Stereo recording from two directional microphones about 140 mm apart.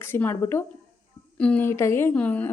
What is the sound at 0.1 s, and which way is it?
A woman's voice, 15° left (ahead or behind).